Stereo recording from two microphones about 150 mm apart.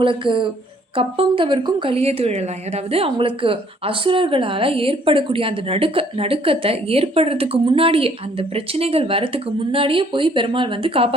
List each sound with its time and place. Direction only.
0.0 s speech: 35° right (ahead or behind)